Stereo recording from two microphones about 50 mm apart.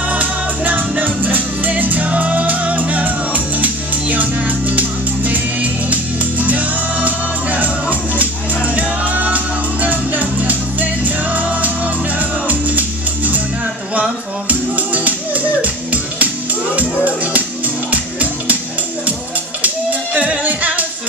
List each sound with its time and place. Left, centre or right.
0.1 s music: right
14.5 s music: right
19.6 s music: right